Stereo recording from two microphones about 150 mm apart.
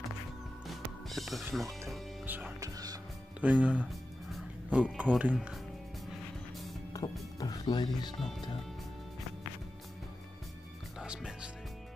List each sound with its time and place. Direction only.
0.7 s music: centre (ahead or behind)
1.5 s speech: centre (ahead or behind)
2.2 s speech: 15° right (ahead or behind)
7.3 s speech: 25° left (ahead or behind)
8.2 s speech: centre (ahead or behind)
11.0 s music: 5° right (ahead or behind)